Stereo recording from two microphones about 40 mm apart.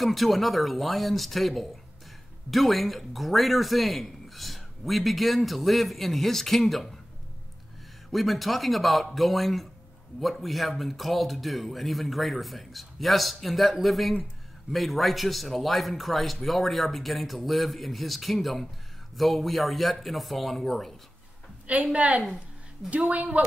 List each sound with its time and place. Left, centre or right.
0.0 s a man's voice: centre
8.1 s a man's voice: centre
21.9 s a woman's voice: right